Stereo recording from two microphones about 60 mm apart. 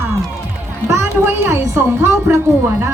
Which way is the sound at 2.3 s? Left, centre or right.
Right.